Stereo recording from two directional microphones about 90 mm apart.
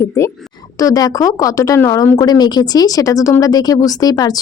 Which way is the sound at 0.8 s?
40° left (ahead or behind).